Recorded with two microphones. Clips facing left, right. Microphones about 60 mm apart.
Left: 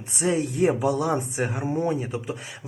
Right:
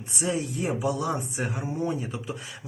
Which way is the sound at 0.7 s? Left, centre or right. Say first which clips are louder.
Left 4 dB; left.